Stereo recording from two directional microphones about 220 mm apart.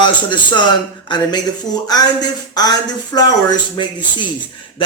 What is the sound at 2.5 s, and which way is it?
Speech, 20° left (ahead or behind).